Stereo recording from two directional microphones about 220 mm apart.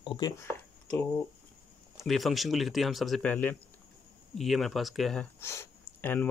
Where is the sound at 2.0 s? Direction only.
Centre (ahead or behind).